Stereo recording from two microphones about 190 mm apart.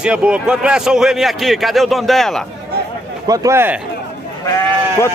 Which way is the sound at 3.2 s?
15° right (ahead or behind).